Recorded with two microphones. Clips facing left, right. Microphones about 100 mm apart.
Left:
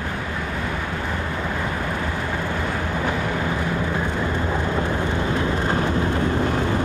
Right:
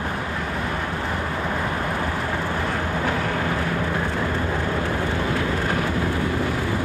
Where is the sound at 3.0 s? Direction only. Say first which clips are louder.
Left 1 dB; 15° left (ahead or behind).